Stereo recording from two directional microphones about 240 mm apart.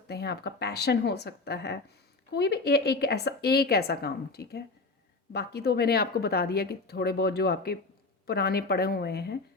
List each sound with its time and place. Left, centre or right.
0.1 s speech: left